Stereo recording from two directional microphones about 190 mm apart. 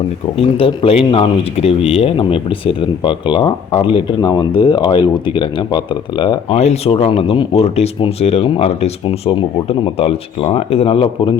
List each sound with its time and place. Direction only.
0.3 s speech: 30° left (ahead or behind)